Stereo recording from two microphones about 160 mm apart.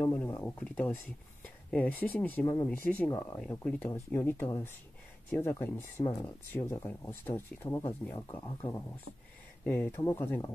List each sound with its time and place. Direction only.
0.0 s speech: 10° left (ahead or behind)